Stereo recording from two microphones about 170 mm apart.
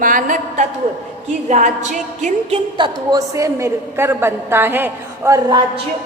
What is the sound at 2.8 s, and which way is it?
A woman's voice, 25° right (ahead or behind).